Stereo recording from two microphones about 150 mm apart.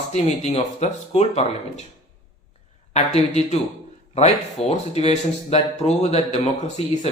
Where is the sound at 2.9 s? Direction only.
45° left (ahead or behind).